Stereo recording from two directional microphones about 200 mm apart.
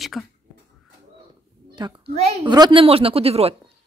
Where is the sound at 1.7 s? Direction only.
25° right (ahead or behind).